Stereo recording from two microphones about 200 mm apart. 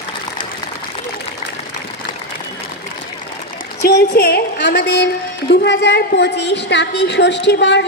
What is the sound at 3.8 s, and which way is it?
A woman's voice, 50° left (ahead or behind).